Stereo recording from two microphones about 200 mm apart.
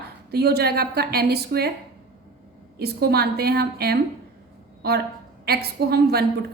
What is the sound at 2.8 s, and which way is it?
A woman's voice, 50° right (ahead or behind).